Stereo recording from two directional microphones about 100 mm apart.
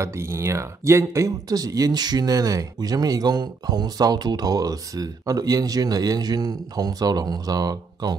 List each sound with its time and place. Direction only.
0.0 s speech: 25° right (ahead or behind); by 8.2 s 40° right (ahead or behind)